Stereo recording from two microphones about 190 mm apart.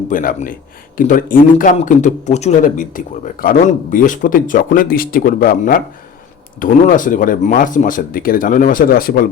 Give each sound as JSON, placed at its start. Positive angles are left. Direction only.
{"t": 0.1, "sound": "speech", "side_deg": 45}